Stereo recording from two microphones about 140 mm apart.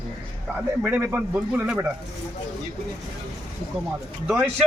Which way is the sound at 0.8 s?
10° right (ahead or behind).